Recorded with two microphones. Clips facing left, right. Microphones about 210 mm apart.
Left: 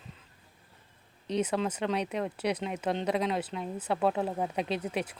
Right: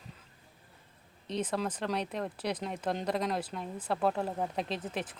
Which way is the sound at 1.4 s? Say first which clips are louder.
Left 1 dB; 5° left (ahead or behind).